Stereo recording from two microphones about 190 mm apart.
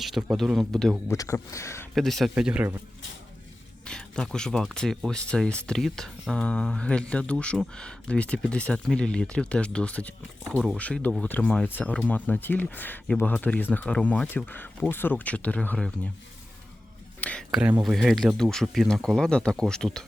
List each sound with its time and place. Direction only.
0.0 s speech: centre (ahead or behind)
1.0 s speech: 15° left (ahead or behind)
2.0 s speech: centre (ahead or behind)
3.8 s speech: 5° left (ahead or behind)
17.2 s speech: 5° left (ahead or behind)
17.6 s speech: 10° right (ahead or behind)